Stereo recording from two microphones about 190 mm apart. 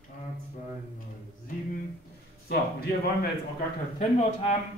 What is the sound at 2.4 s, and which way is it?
Speech, 55° left (ahead or behind).